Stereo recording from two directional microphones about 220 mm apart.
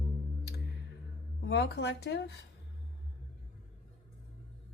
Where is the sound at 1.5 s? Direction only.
50° left (ahead or behind).